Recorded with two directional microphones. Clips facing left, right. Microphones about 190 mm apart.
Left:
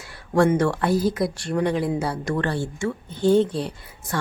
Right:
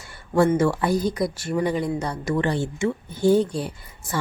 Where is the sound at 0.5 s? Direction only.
5° right (ahead or behind).